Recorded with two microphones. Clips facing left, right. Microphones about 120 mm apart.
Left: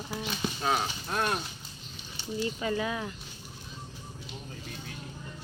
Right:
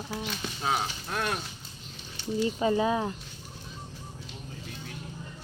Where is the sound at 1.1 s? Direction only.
25° left (ahead or behind).